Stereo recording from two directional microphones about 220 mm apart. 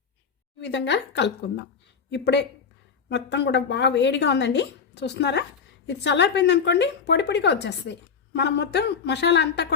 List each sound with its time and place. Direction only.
0.6 s speech: 50° left (ahead or behind)